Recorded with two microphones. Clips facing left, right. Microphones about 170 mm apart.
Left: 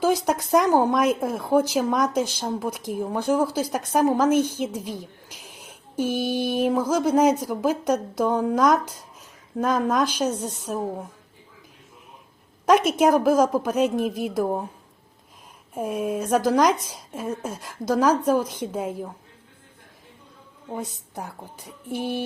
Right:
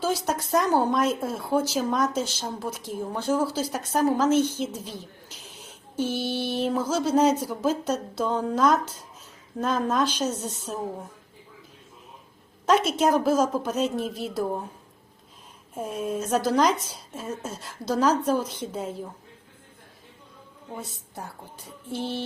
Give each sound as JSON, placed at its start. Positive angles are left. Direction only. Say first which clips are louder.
{"t": 0.0, "sound": "speech", "louder": "left 5 dB", "side_deg": 15}
{"t": 12.6, "sound": "speech", "louder": "left 3 dB", "side_deg": 15}
{"t": 15.7, "sound": "speech", "louder": "left 3 dB", "side_deg": 10}
{"t": 20.7, "sound": "speech", "louder": "left 6 dB", "side_deg": 15}